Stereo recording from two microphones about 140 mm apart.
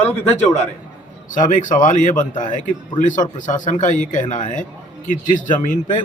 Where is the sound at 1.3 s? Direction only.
65° left (ahead or behind).